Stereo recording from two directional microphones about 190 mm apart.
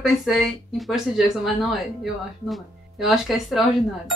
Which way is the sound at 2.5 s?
Centre (ahead or behind).